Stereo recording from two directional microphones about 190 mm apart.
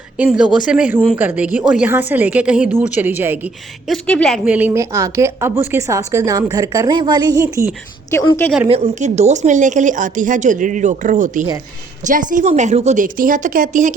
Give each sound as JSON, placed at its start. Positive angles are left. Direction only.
{"t": 0.2, "sound": "a woman's voice", "side_deg": -5}
{"t": 4.4, "sound": "a woman's voice", "side_deg": -10}
{"t": 8.1, "sound": "a woman's voice", "side_deg": 20}
{"t": 8.7, "sound": "a woman's voice", "side_deg": -35}